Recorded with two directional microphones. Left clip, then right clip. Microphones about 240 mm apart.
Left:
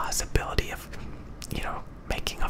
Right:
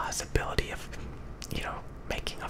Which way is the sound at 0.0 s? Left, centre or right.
Centre.